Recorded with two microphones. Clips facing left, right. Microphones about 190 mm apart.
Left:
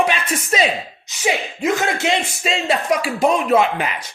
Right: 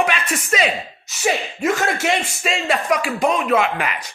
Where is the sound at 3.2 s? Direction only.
40° left (ahead or behind).